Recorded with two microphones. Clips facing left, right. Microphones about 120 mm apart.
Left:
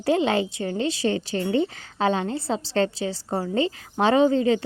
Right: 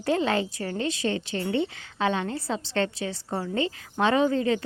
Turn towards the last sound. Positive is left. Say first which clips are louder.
# left 4 dB
turn(degrees=25)  # may be behind; listen again after turning